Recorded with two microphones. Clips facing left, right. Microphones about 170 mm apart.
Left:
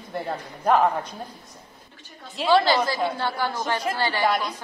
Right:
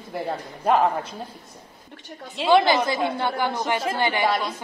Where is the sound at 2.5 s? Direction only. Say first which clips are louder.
Right 2 dB; 20° right (ahead or behind).